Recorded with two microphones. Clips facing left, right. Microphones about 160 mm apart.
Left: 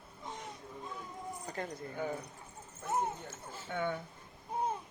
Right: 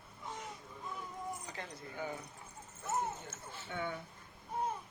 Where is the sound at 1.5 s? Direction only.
50° left (ahead or behind).